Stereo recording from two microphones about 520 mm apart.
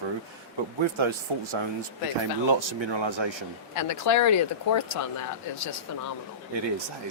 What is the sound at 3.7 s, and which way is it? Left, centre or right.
Speech, left.